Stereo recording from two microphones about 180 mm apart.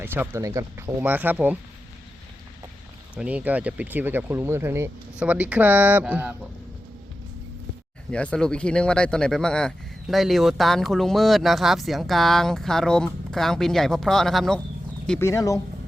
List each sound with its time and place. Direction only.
0.0 s speech: 10° right (ahead or behind)
3.2 s speech: 10° right (ahead or behind)
8.1 s speech: 5° left (ahead or behind)
15.3 s speech: 20° left (ahead or behind)